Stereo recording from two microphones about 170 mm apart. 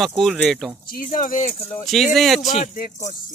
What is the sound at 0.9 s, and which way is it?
Speech, 55° left (ahead or behind).